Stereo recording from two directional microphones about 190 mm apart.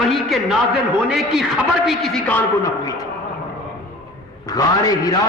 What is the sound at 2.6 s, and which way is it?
Speech, 20° left (ahead or behind).